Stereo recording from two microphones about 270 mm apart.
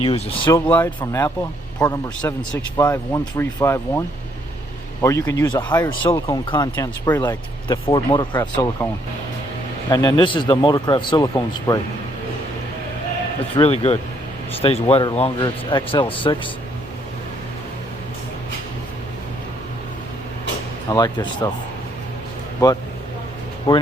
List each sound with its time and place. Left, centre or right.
0.0 s speech: centre
0.7 s speech: centre
13.6 s speech: left
20.9 s speech: centre
23.7 s speech: centre